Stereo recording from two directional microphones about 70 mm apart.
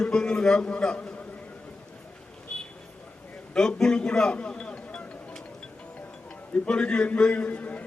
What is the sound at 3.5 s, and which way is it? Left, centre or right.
A man's voice, centre.